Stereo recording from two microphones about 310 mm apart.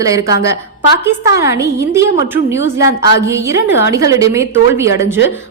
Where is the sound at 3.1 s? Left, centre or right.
Centre.